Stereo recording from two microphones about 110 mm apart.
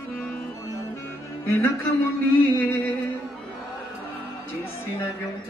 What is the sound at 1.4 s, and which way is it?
A man's voice, 25° left (ahead or behind).